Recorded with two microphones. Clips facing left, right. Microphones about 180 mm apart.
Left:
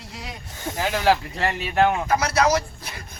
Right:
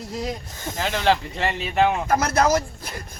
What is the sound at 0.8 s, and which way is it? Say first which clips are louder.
Speech: left 1 dB; 10° left (ahead or behind).